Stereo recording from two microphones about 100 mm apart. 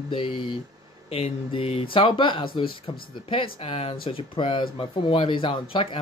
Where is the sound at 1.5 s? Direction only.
70° left (ahead or behind).